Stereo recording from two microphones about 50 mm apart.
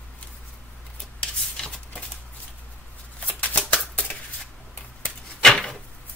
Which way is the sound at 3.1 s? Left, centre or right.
Left.